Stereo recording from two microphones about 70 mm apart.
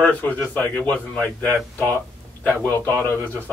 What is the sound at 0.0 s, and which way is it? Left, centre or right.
A man's voice, left.